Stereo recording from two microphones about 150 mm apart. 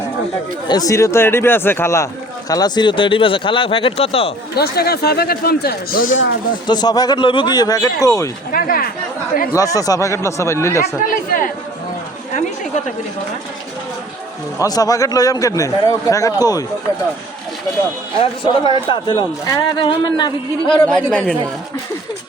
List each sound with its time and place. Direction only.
0.7 s speech: 25° left (ahead or behind); by 4.3 s 40° left (ahead or behind)
4.5 s speech: 90° left; by 6.1 s 70° left (ahead or behind)
6.7 s speech: 25° left (ahead or behind)
8.5 s speech: 70° left (ahead or behind)
9.6 s speech: 25° left (ahead or behind)
11.0 s speech: 65° left (ahead or behind)
12.3 s chatter: 55° left (ahead or behind)
14.6 s speech: 25° left (ahead or behind)
18.2 s speech: 35° left (ahead or behind)
20.8 s speech: 5° left (ahead or behind)